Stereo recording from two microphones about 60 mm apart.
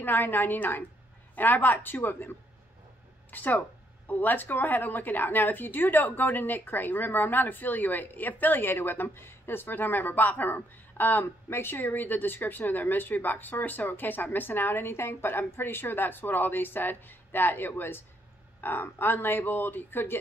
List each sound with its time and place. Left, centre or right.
0.0 s a woman's voice: left